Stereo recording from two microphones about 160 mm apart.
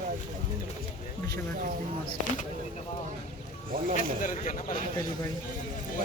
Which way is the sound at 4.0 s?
55° left (ahead or behind).